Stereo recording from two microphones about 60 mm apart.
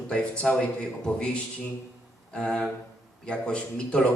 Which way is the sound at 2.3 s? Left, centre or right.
Centre.